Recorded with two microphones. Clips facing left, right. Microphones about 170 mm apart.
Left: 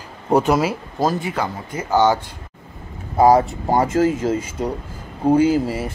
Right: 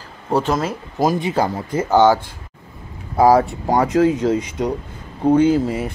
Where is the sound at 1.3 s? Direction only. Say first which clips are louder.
Right 5 dB; 30° right (ahead or behind).